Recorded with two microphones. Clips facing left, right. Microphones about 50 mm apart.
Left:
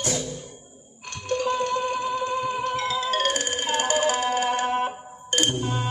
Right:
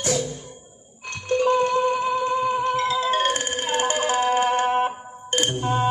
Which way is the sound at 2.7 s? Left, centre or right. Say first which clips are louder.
Right 3 dB; right.